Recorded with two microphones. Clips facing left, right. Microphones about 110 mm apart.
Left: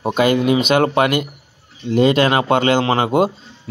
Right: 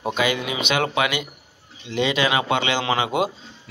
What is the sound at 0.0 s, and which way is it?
Speech, 45° left (ahead or behind).